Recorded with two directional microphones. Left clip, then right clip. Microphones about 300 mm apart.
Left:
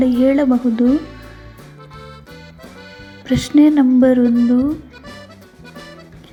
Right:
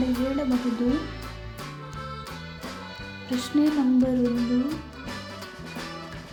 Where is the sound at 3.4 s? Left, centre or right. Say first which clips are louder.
Left 11 dB; left.